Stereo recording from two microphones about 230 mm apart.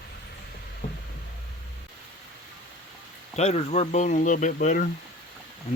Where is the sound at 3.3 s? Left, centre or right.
Left.